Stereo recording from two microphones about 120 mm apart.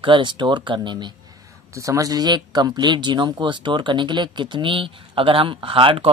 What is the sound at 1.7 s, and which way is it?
Speech, 25° right (ahead or behind).